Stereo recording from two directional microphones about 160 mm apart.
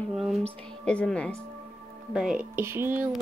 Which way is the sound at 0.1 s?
Centre (ahead or behind).